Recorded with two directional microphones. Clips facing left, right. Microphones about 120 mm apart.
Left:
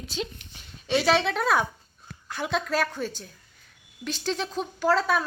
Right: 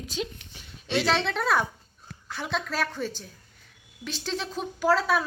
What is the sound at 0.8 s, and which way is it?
Speech, 5° left (ahead or behind).